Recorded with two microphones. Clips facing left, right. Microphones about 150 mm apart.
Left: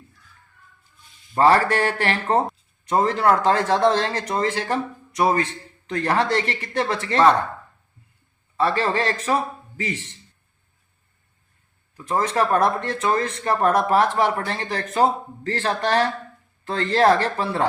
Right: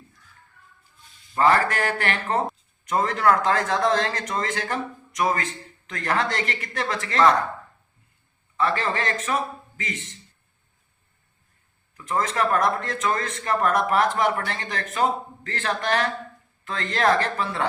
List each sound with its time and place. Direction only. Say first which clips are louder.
1.4 s a man's voice: left 3 dB; 35° left (ahead or behind)
8.5 s speech: left 3 dB; 35° left (ahead or behind)
11.9 s speech: left 3 dB; 30° left (ahead or behind)